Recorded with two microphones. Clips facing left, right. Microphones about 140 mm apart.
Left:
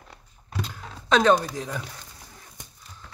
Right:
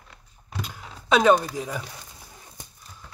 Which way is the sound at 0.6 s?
10° right (ahead or behind).